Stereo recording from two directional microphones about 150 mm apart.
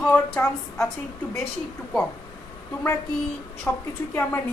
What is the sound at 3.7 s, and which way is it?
Speech, 10° left (ahead or behind).